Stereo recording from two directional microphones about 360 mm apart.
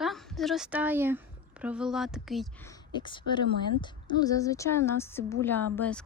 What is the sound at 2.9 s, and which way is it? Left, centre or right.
A woman's voice, centre.